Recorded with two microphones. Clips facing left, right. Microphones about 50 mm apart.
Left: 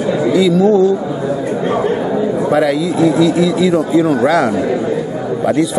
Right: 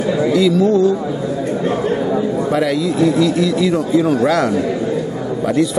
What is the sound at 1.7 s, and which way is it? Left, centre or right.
Chatter, centre.